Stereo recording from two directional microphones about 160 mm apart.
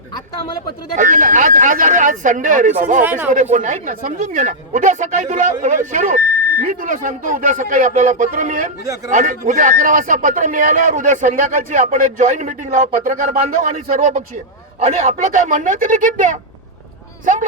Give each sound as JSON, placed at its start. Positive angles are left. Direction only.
{"t": 0.9, "sound": "speech", "side_deg": -55}
{"t": 13.8, "sound": "speech", "side_deg": -45}
{"t": 14.8, "sound": "speech", "side_deg": -40}